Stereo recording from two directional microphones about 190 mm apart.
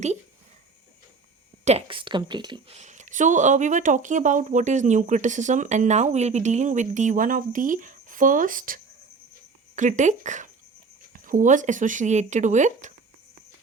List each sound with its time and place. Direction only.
1.6 s speech: 30° right (ahead or behind)
2.7 s speech: 40° right (ahead or behind)